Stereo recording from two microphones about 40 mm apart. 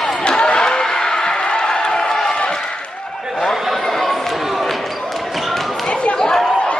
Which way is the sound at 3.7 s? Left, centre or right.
Centre.